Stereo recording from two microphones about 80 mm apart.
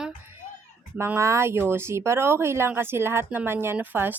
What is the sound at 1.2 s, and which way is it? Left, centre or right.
A woman's voice, right.